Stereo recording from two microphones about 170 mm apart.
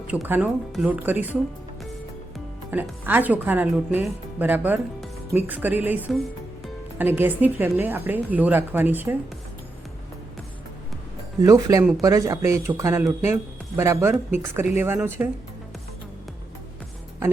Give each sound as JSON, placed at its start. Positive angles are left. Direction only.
{"t": 0.1, "sound": "a woman's voice", "side_deg": -10}
{"t": 2.7, "sound": "a woman's voice", "side_deg": -10}
{"t": 11.4, "sound": "a woman's voice", "side_deg": -20}